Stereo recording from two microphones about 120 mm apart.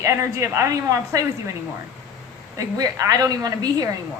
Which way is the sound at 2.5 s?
30° right (ahead or behind).